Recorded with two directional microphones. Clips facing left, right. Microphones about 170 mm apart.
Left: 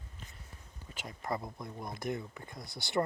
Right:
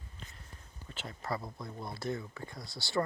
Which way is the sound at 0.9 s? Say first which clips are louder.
Left 1 dB; 10° left (ahead or behind).